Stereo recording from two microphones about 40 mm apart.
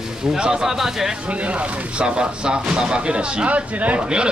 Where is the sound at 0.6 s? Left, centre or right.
Centre.